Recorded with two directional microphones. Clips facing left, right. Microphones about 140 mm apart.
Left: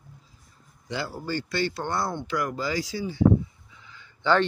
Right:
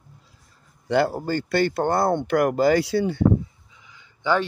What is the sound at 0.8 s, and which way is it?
Speech, 60° right (ahead or behind).